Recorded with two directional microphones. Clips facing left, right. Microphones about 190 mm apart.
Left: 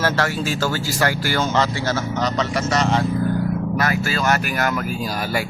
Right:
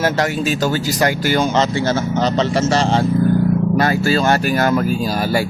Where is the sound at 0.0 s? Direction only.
20° right (ahead or behind).